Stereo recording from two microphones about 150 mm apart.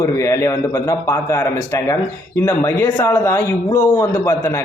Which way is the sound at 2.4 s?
15° left (ahead or behind).